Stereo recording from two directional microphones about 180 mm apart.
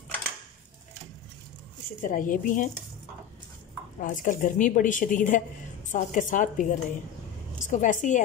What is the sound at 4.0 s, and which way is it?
A woman's voice, 45° left (ahead or behind).